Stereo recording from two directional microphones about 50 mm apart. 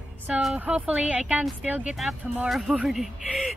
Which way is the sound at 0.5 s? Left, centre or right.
Right.